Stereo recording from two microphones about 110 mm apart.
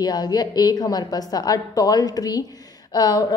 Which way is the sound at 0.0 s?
35° left (ahead or behind).